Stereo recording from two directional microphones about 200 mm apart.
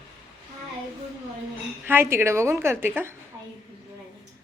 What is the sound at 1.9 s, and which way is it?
Speech, 10° right (ahead or behind).